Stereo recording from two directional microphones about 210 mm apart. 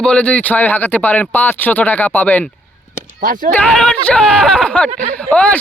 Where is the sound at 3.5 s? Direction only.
5° left (ahead or behind).